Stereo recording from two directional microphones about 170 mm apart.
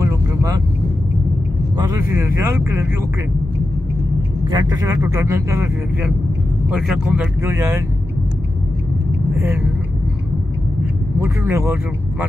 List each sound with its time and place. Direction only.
0.0 s vehicle: 20° right (ahead or behind)
2.0 s speech: 15° right (ahead or behind)
4.5 s speech: 20° right (ahead or behind)
6.7 s speech: 5° right (ahead or behind)
11.1 s speech: 15° right (ahead or behind)